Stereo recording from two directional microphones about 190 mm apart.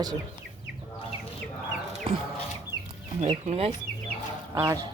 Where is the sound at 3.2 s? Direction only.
35° right (ahead or behind).